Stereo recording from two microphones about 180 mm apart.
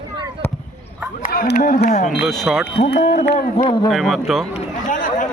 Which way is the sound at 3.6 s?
25° left (ahead or behind).